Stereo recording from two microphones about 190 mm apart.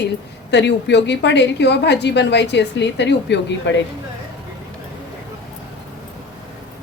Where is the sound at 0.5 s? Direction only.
65° left (ahead or behind).